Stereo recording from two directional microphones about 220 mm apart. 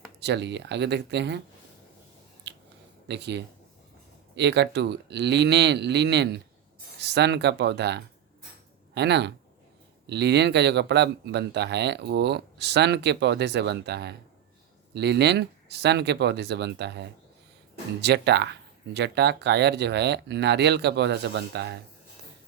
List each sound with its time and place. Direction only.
0.2 s speech: 50° right (ahead or behind)
3.1 s speech: 50° right (ahead or behind)